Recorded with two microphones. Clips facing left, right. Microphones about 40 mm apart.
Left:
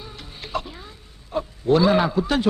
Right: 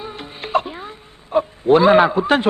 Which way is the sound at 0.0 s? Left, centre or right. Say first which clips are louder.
Right 8 dB; right.